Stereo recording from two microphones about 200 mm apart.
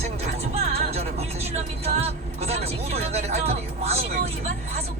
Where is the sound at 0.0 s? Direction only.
30° right (ahead or behind).